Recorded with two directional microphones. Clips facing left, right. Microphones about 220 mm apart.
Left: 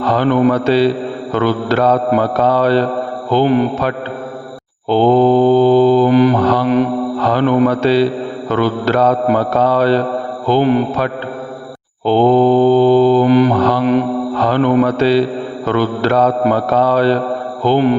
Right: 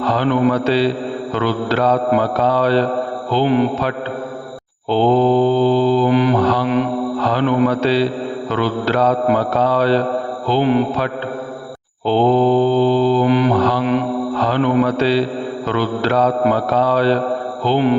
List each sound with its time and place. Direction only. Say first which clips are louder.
0.0 s mantra: left 3 dB; 50° left (ahead or behind)